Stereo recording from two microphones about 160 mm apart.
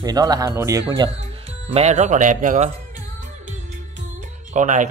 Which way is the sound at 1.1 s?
40° right (ahead or behind).